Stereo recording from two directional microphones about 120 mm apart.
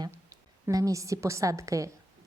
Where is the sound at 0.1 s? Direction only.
30° right (ahead or behind).